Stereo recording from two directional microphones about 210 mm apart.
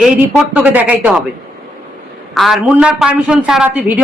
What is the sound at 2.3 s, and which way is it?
A man's voice, centre (ahead or behind).